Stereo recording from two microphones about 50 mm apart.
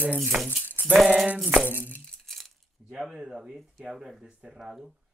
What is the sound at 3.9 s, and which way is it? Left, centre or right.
Speech, centre.